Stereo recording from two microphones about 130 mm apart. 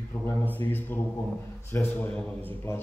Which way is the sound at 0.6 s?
15° left (ahead or behind).